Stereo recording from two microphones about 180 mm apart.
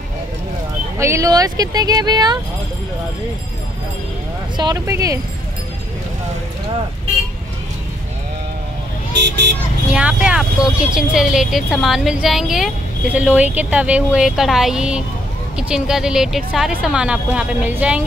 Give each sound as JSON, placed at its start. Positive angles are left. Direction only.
{"t": 0.9, "sound": "speech", "side_deg": -15}
{"t": 4.6, "sound": "speech", "side_deg": -20}
{"t": 9.1, "sound": "speech", "side_deg": -70}
{"t": 9.9, "sound": "a woman's voice", "side_deg": -5}